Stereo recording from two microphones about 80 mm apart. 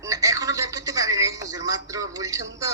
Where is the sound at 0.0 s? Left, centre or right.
Right.